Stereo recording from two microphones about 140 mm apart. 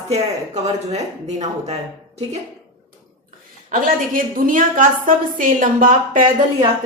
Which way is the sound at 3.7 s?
80° right.